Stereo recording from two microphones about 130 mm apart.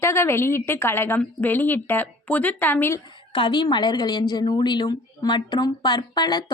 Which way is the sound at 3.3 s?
40° left (ahead or behind).